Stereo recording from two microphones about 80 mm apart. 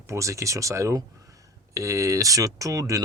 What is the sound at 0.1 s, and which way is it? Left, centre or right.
Speech, right.